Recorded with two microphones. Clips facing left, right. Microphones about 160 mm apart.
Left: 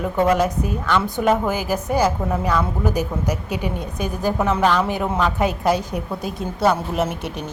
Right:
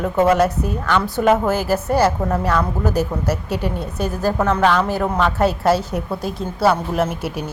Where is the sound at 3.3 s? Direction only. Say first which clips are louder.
Right 2 dB; 40° right (ahead or behind).